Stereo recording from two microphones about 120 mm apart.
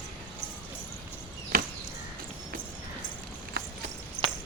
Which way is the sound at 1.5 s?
90° right.